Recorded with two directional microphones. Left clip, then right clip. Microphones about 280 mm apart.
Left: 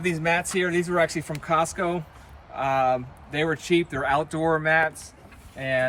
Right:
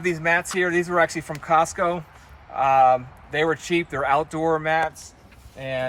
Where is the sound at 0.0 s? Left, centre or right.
Centre.